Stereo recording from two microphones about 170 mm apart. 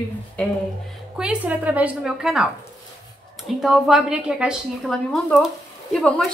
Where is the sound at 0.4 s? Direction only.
5° left (ahead or behind).